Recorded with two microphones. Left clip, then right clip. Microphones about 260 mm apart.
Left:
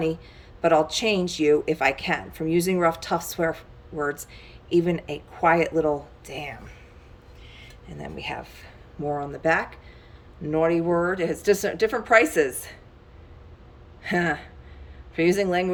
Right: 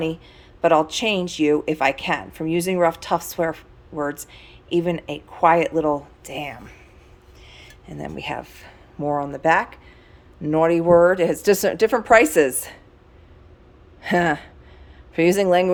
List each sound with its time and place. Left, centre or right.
0.6 s a woman's voice: centre
14.0 s speech: centre